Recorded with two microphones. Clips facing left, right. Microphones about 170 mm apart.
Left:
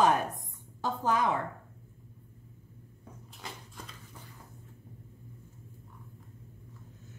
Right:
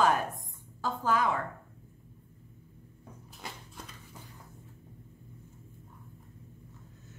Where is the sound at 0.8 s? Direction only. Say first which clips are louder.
Even; 20° left (ahead or behind).